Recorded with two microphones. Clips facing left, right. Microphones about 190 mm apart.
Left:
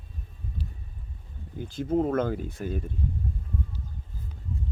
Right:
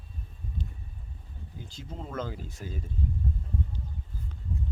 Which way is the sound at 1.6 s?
55° left (ahead or behind).